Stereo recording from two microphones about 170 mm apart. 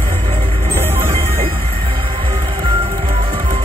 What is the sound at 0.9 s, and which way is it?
Music, 35° right (ahead or behind).